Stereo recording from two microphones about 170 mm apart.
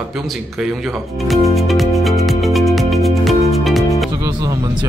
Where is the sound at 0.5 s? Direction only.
Centre (ahead or behind).